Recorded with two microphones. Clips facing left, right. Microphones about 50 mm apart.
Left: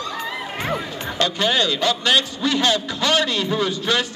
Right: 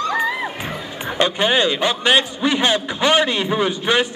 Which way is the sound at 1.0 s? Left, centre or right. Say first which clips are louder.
Right 3 dB; right.